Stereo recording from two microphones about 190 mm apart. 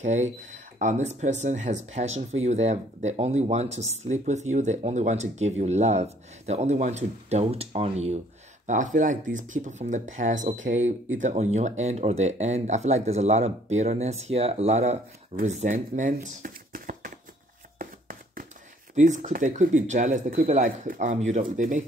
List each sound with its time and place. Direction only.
0.0 s speech: 40° right (ahead or behind)
17.7 s hands: 50° right (ahead or behind)
18.9 s speech: 40° right (ahead or behind)